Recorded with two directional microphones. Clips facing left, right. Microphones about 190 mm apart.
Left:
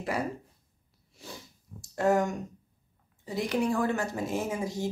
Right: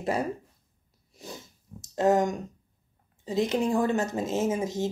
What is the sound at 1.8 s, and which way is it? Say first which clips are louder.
Speech: right 3 dB; 20° right (ahead or behind).